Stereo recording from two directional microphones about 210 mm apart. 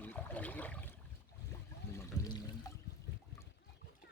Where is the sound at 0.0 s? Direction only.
5° left (ahead or behind).